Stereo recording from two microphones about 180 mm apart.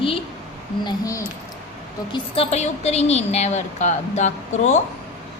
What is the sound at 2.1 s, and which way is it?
A woman's voice, 35° left (ahead or behind).